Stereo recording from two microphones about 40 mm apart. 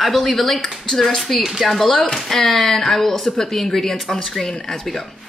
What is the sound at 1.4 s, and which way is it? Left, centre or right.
Speech, centre.